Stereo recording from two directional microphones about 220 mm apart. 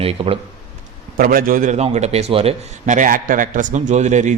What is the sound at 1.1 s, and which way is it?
A man's voice, 40° right (ahead or behind).